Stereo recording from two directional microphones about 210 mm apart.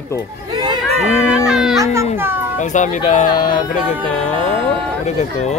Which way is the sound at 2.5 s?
35° left (ahead or behind).